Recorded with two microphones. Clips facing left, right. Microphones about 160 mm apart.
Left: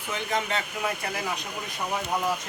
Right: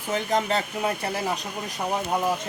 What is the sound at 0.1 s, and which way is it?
Speech, 40° right (ahead or behind).